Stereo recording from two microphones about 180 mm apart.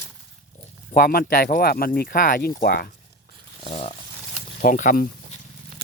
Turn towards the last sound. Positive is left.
turn(degrees=40)  # may be behind; listen again after turning